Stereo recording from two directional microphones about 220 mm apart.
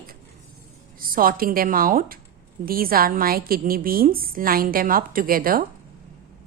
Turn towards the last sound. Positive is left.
turn(degrees=-40)  # may be behind; listen again after turning